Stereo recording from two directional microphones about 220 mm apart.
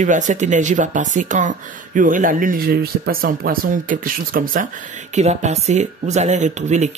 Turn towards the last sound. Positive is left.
turn(degrees=-30)  # may be behind; listen again after turning